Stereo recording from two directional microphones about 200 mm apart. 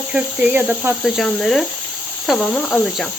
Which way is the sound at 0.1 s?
5° right (ahead or behind).